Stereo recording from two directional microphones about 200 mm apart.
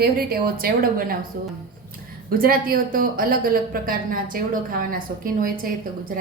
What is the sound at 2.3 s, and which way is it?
Speech, 45° right (ahead or behind).